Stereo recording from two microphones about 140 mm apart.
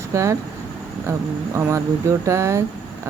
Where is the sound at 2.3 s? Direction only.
20° right (ahead or behind).